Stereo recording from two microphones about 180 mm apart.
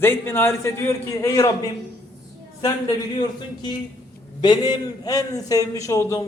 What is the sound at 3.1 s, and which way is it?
A man's voice, 25° left (ahead or behind).